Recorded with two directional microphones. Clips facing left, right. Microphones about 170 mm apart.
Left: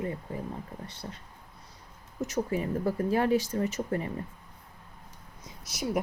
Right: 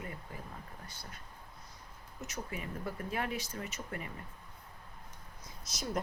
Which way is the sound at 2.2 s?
40° left (ahead or behind).